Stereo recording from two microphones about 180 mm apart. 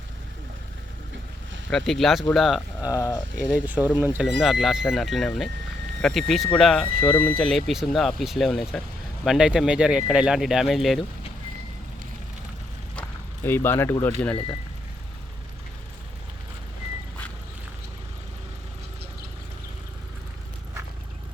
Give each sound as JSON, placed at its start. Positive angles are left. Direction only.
{"t": 1.7, "sound": "speech", "side_deg": 0}
{"t": 2.9, "sound": "speech", "side_deg": 20}
{"t": 3.5, "sound": "speech", "side_deg": -5}
{"t": 13.0, "sound": "a sound", "side_deg": 15}